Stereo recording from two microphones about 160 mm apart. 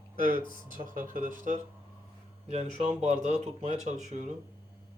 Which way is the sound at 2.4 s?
40° right (ahead or behind).